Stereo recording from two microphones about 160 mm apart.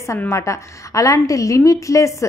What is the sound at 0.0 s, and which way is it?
A woman's voice, 20° left (ahead or behind).